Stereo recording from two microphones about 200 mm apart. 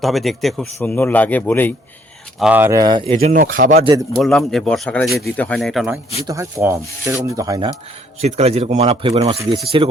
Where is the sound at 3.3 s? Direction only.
45° right (ahead or behind).